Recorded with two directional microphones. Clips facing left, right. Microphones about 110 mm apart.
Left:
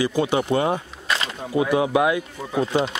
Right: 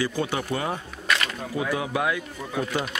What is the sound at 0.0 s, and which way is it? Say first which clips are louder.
Speech: left 6 dB; 15° left (ahead or behind).